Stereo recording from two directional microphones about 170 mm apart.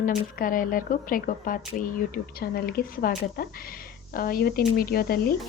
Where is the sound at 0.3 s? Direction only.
55° left (ahead or behind).